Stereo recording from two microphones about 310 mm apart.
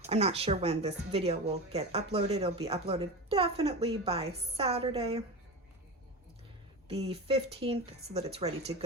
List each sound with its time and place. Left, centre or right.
0.1 s speech: centre
6.8 s speech: centre